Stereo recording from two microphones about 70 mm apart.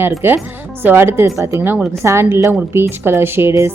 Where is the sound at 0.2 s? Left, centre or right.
Right.